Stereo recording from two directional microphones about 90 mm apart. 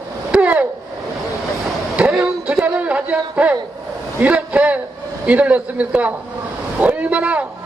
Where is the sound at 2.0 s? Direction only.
10° right (ahead or behind).